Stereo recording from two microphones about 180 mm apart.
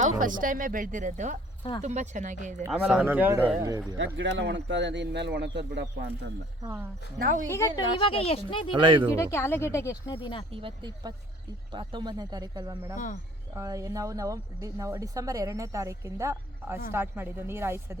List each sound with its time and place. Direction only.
0.0 s speech: 50° right (ahead or behind)
2.6 s speech: 5° right (ahead or behind)
3.9 s speech: 90° right
7.2 s speech: 50° right (ahead or behind)
7.9 s speech: 30° left (ahead or behind)
8.7 s speech: 25° right (ahead or behind)
9.1 s speech: 15° left (ahead or behind)
10.5 s speech: 30° right (ahead or behind); by 17.9 s 15° right (ahead or behind)